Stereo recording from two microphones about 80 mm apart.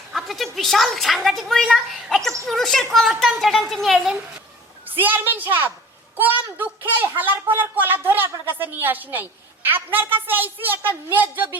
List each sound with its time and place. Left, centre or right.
0.1 s a woman's voice: centre
4.9 s a woman's voice: right